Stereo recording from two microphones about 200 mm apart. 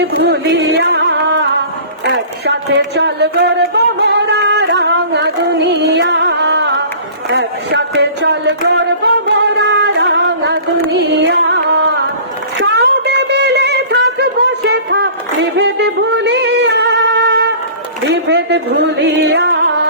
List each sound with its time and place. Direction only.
0.1 s music: 55° right (ahead or behind)
2.0 s speech: 60° right (ahead or behind)
9.2 s music: 60° right (ahead or behind)
12.5 s a sound: 65° right (ahead or behind)
18.1 s music: 60° right (ahead or behind)